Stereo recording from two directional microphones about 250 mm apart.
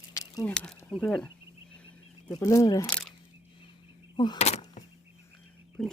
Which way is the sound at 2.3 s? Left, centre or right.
Centre.